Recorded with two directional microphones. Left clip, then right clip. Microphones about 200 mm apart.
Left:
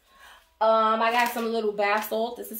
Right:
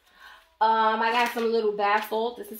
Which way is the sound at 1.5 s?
20° left (ahead or behind).